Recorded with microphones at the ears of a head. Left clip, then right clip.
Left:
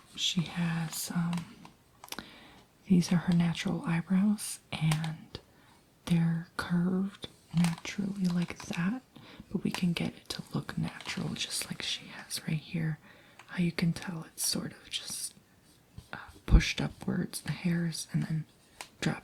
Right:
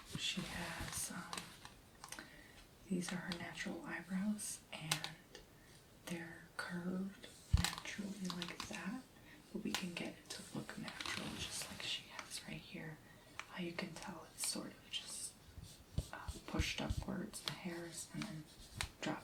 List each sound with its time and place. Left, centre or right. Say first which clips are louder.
0.2 s speech: left 10 dB; left
2.0 s clicking: left 9 dB; left
2.8 s speech: left 13 dB; left